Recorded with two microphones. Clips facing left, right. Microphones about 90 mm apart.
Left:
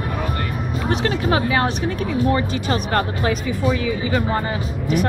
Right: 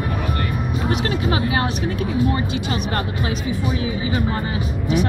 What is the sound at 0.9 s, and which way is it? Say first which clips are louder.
Speech: left 3 dB; 35° left (ahead or behind).